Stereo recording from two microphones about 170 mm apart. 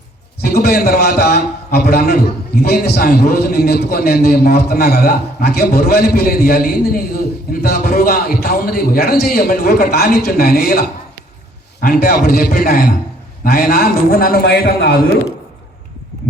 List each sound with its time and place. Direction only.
0.4 s a man's voice: 60° left (ahead or behind)